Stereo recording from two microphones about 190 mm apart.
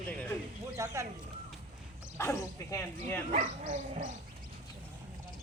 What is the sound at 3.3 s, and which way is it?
Speech, 40° right (ahead or behind).